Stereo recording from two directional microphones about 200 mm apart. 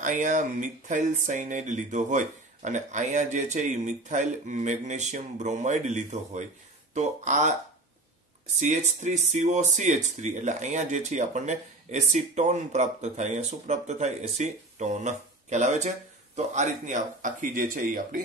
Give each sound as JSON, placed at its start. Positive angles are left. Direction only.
{"t": 0.0, "sound": "speech", "side_deg": -40}
{"t": 8.5, "sound": "speech", "side_deg": -35}